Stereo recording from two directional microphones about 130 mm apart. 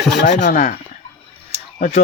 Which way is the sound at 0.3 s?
90° left.